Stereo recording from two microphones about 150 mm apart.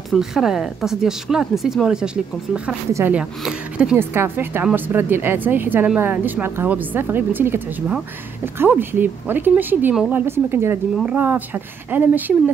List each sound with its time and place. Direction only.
0.1 s a woman's voice: centre (ahead or behind)